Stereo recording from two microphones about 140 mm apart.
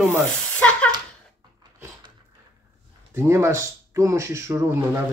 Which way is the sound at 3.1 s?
20° right (ahead or behind).